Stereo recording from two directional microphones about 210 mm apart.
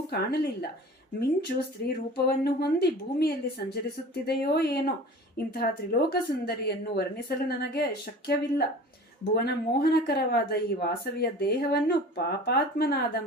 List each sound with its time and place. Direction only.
0.1 s speech: 50° left (ahead or behind)